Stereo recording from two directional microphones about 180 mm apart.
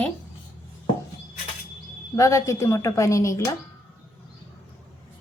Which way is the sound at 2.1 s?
15° left (ahead or behind).